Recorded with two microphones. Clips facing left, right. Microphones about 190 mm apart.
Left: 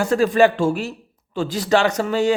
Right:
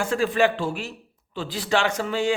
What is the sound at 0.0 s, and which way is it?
A man's voice, 40° left (ahead or behind).